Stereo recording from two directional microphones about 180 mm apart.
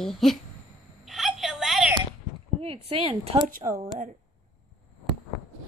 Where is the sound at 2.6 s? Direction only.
30° right (ahead or behind).